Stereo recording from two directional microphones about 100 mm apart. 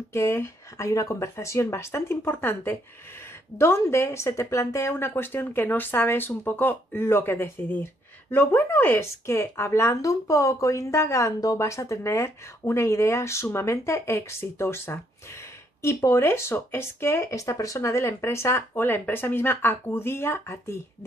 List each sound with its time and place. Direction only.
0.1 s speech: 25° left (ahead or behind)